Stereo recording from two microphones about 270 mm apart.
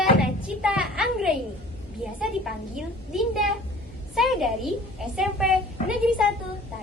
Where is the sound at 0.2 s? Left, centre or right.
Centre.